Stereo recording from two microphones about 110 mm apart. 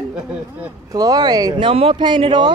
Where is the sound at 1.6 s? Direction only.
55° right (ahead or behind).